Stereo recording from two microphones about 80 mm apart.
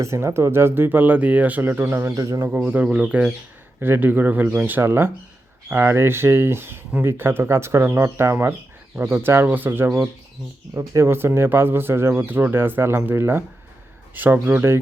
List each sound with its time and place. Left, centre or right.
0.0 s speech: right
2.1 s speech: right
2.6 s speech: centre
3.8 s speech: right